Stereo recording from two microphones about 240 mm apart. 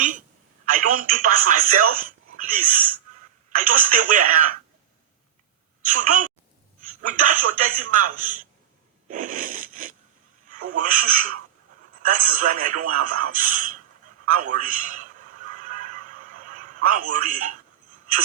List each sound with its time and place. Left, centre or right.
0.6 s speech: right
5.8 s a woman's voice: right
15.4 s a sound: right